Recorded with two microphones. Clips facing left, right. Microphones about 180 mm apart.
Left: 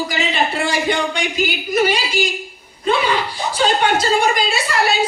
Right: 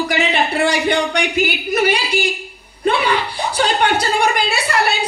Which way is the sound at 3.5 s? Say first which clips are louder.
Even; 60° right (ahead or behind).